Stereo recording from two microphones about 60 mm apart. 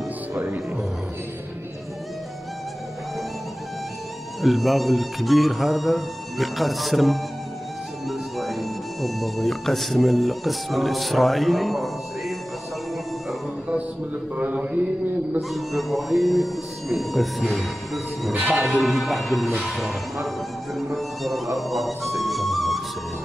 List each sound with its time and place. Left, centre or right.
4.4 s speech: centre
14.3 s mantra: right
15.5 s speech: centre
19.6 s music: centre